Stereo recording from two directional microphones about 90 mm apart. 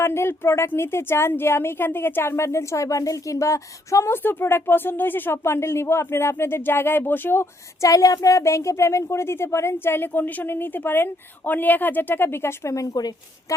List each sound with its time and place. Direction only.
0.0 s speech: 30° left (ahead or behind)
7.9 s speech: 40° left (ahead or behind)